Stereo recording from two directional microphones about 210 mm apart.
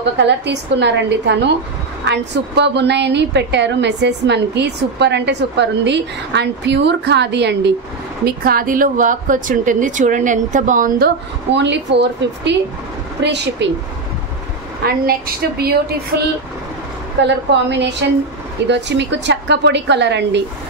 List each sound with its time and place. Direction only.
0.2 s a woman's voice: 55° right (ahead or behind); by 11.1 s 40° right (ahead or behind)
11.5 s a woman's voice: 55° right (ahead or behind)
15.0 s a woman's voice: 45° right (ahead or behind)